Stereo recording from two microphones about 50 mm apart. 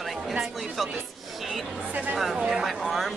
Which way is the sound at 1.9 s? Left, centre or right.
Right.